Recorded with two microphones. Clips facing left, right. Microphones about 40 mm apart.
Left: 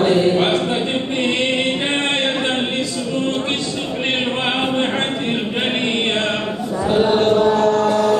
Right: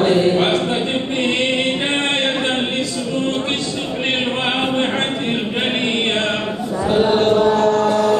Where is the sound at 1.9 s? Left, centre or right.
Centre.